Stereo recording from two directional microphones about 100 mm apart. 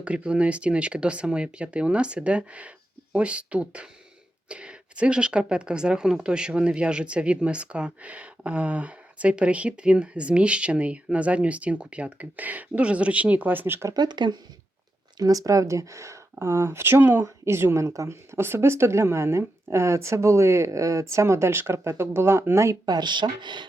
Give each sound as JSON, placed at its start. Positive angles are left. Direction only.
{"t": 0.0, "sound": "a woman's voice", "side_deg": -10}
{"t": 13.9, "sound": "speech", "side_deg": -45}
{"t": 15.2, "sound": "speech", "side_deg": -35}
{"t": 22.9, "sound": "speech", "side_deg": -45}